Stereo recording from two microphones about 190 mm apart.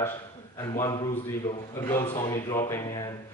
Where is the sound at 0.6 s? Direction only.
15° left (ahead or behind).